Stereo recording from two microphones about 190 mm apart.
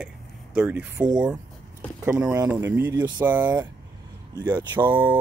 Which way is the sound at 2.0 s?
20° right (ahead or behind).